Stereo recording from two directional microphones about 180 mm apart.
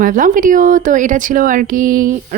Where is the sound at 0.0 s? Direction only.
50° right (ahead or behind).